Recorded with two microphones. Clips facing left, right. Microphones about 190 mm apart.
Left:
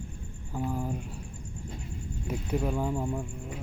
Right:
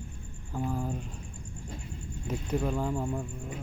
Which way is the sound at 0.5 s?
10° left (ahead or behind).